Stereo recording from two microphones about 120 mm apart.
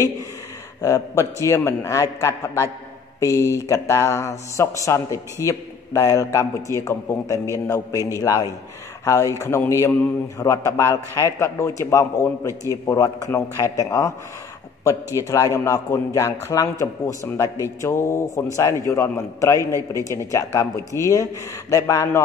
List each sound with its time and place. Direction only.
0.7 s a man's voice: 30° left (ahead or behind)
15.1 s a man's voice: 25° left (ahead or behind)